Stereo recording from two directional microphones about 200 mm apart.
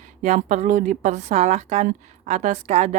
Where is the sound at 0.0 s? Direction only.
35° right (ahead or behind).